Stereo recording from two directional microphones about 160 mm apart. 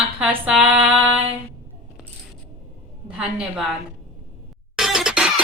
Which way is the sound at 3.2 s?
5° right (ahead or behind).